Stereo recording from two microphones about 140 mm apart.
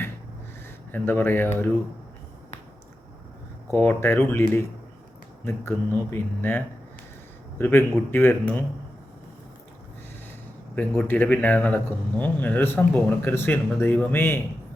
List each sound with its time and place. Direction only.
0.9 s speech: 15° left (ahead or behind)
3.7 s speech: 15° left (ahead or behind)
7.6 s speech: 15° left (ahead or behind)
10.8 s speech: 10° left (ahead or behind)